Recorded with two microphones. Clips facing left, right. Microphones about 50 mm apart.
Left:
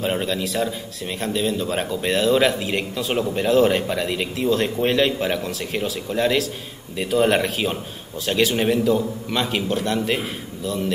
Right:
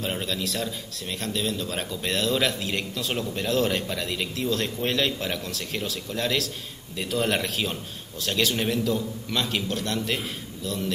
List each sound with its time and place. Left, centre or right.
0.0 s a man's voice: centre